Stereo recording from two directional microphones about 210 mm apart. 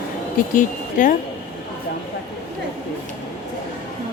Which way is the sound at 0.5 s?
40° left (ahead or behind).